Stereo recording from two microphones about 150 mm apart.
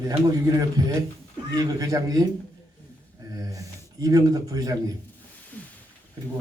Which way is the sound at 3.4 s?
25° right (ahead or behind).